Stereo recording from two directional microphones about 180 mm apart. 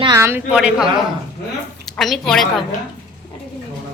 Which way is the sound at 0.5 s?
5° right (ahead or behind).